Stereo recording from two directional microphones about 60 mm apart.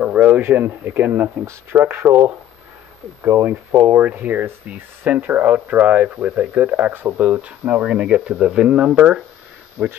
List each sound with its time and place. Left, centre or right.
0.0 s a sound: right
0.4 s speech: right
1.4 s speech: right
1.8 s speech: right
3.3 s speech: right; by 9.2 s centre
9.8 s speech: right